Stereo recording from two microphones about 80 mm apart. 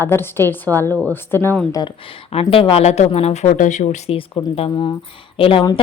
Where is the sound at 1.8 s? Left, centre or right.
Left.